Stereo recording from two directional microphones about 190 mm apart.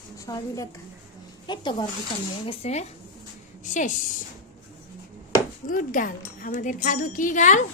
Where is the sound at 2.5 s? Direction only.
35° left (ahead or behind).